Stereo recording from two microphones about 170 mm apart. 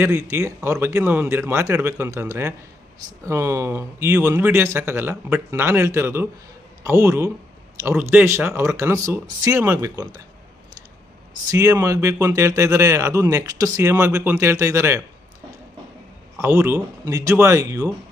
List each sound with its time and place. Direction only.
0.0 s speech: 15° right (ahead or behind)
11.4 s speech: 20° right (ahead or behind)
16.4 s speech: 10° right (ahead or behind)